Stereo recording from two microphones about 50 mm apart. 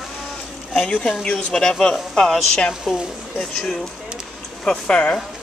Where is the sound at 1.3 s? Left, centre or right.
Left.